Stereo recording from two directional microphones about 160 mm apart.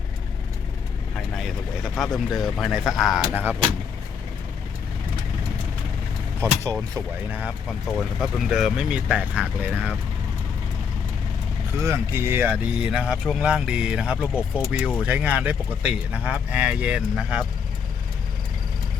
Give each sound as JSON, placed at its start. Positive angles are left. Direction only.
{"t": 1.4, "sound": "speech", "side_deg": 0}
{"t": 6.4, "sound": "speech", "side_deg": -15}
{"t": 8.2, "sound": "speech", "side_deg": 0}
{"t": 11.8, "sound": "speech", "side_deg": -15}